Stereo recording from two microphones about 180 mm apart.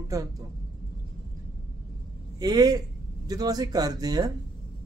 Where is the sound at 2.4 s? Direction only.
20° right (ahead or behind).